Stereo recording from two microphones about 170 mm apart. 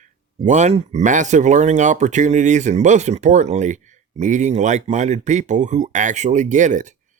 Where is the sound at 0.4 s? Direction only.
45° right (ahead or behind).